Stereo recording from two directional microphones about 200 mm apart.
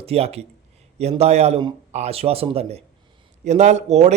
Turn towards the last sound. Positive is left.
turn(degrees=-35)  # may be behind; listen again after turning